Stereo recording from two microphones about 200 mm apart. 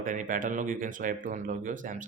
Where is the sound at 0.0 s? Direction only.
40° right (ahead or behind).